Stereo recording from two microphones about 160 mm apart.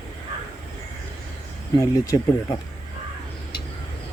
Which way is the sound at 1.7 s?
20° left (ahead or behind).